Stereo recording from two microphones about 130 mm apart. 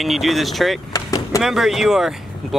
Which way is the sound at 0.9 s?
25° left (ahead or behind).